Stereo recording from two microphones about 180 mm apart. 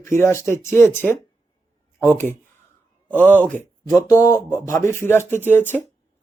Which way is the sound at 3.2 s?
10° right (ahead or behind).